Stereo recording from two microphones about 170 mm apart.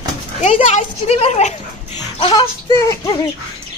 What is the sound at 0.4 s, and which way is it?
A woman's voice, 40° left (ahead or behind).